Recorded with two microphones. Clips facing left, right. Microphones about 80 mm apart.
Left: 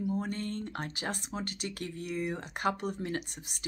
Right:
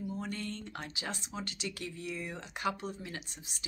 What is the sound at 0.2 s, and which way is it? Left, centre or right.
Speech, left.